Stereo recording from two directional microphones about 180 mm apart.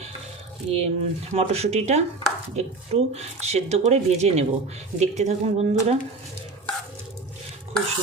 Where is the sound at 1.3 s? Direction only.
35° right (ahead or behind).